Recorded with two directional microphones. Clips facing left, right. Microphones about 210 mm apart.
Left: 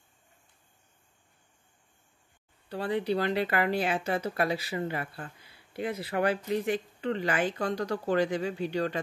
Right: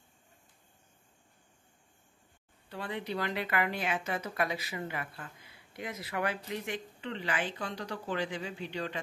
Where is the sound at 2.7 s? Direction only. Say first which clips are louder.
Left 8 dB; 35° left (ahead or behind).